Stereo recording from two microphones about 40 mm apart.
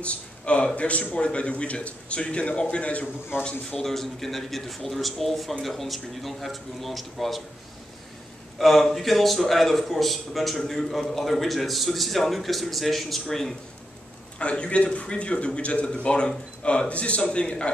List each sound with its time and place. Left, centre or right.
0.0 s a man's voice: left
3.8 s speech: centre
8.5 s speech: centre
14.4 s speech: left